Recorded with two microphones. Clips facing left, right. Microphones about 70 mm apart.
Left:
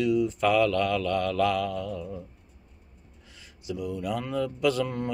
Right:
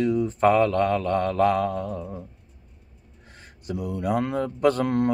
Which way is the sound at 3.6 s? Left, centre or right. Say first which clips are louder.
Right 4 dB; right.